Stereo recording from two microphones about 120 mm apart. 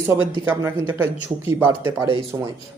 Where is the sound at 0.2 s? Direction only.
15° right (ahead or behind).